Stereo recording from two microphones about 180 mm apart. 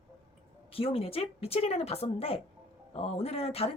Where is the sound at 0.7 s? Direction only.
30° left (ahead or behind).